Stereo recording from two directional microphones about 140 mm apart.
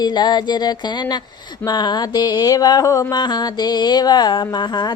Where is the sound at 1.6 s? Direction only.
30° left (ahead or behind).